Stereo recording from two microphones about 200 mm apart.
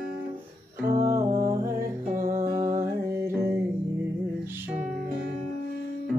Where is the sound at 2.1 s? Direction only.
45° right (ahead or behind).